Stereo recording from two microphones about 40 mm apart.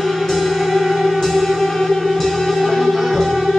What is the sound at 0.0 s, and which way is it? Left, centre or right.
Music, centre.